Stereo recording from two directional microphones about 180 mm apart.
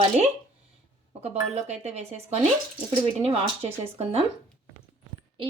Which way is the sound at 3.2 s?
35° right (ahead or behind).